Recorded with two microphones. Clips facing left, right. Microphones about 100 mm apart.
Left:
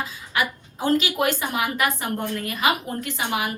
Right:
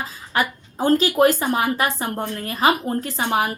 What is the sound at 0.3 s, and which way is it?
Speech, 40° right (ahead or behind).